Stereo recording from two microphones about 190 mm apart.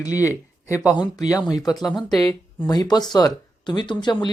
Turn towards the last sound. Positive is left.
turn(degrees=25)  # may be behind; listen again after turning